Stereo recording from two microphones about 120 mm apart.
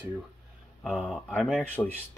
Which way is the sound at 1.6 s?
15° left (ahead or behind).